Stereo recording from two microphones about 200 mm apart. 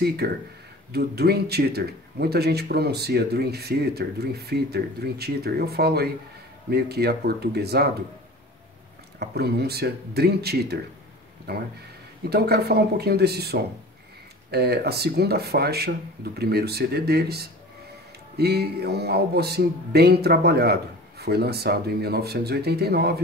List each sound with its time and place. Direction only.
0.2 s speech: 50° right (ahead or behind)
9.2 s speech: 55° right (ahead or behind)